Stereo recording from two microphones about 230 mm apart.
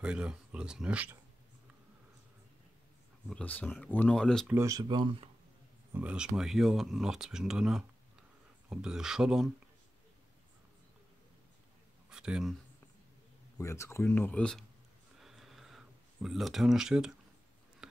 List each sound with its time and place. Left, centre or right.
0.0 s speech: centre
3.3 s speech: centre
4.6 s speech: centre
5.9 s speech: centre
12.1 s a man's voice: centre
13.6 s speech: centre
15.1 s a sound: centre